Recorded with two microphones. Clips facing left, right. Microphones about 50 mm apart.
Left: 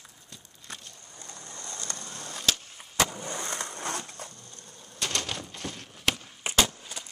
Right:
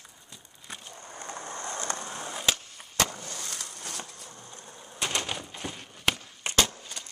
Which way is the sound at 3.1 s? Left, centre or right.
Left.